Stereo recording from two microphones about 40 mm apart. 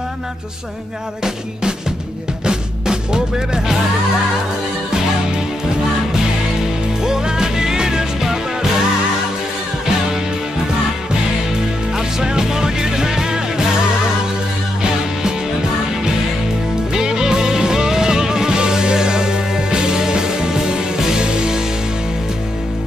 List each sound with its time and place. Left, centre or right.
2.4 s music: centre
7.0 s music: centre
12.2 s music: centre
16.9 s music: centre